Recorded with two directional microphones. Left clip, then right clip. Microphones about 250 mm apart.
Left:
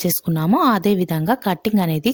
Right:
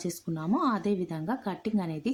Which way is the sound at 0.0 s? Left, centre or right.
Left.